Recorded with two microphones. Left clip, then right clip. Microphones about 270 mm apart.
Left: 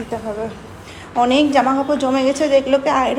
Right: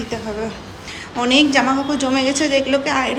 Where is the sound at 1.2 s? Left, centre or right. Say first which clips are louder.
Left 1 dB; centre.